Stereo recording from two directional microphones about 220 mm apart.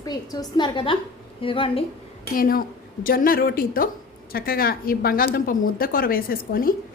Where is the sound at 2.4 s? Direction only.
40° left (ahead or behind).